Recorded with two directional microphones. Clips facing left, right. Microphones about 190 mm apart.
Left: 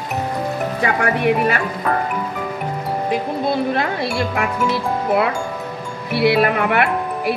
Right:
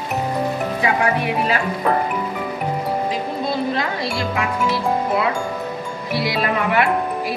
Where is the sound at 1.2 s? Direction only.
55° left (ahead or behind).